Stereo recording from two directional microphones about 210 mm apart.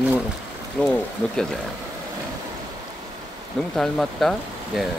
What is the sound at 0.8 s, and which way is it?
Speech, centre (ahead or behind).